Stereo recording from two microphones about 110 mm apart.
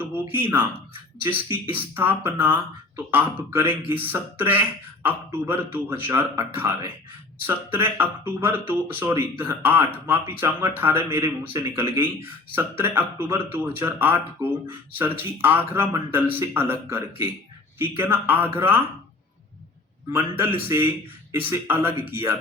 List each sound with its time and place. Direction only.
0.0 s speech: 20° right (ahead or behind)
20.1 s speech: 20° right (ahead or behind)